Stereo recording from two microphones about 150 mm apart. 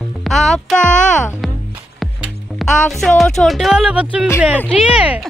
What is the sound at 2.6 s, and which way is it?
Music, centre (ahead or behind).